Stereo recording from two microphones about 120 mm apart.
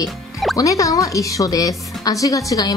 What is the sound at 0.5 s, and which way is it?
Speech, 25° left (ahead or behind).